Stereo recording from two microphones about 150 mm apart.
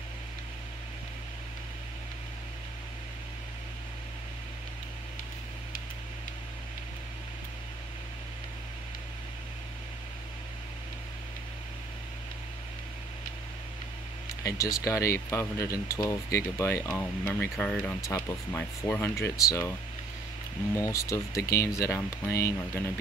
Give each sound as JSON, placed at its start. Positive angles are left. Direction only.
{"t": 14.4, "sound": "speech", "side_deg": 20}
{"t": 20.7, "sound": "speech", "side_deg": 20}